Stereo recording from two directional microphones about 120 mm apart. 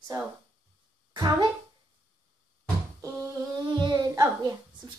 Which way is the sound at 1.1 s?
35° right (ahead or behind).